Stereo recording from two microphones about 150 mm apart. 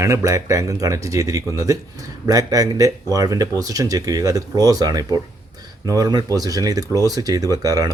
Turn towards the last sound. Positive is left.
turn(degrees=-25)  # may be behind; listen again after turning